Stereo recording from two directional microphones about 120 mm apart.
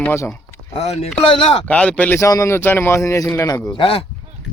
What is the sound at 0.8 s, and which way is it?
Speech, 65° left (ahead or behind).